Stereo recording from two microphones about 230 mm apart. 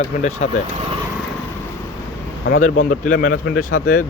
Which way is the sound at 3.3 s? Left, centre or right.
Left.